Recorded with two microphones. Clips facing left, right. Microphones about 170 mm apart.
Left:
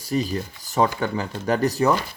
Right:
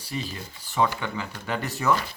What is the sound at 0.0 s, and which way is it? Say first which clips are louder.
A man's voice: left 9 dB; 45° left (ahead or behind).